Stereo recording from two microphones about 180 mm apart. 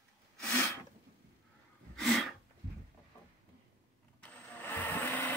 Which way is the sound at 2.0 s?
Centre (ahead or behind).